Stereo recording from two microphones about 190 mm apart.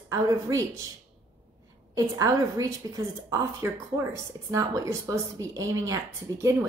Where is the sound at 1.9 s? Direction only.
20° right (ahead or behind).